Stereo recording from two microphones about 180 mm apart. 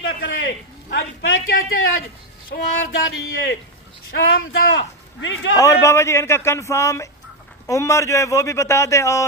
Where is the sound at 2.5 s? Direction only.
65° left (ahead or behind).